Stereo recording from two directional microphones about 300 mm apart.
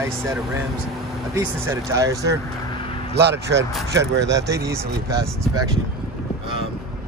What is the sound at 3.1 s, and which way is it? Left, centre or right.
Speech, right.